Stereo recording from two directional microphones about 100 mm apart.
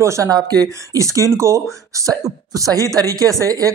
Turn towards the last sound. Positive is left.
turn(degrees=-35)  # may be behind; listen again after turning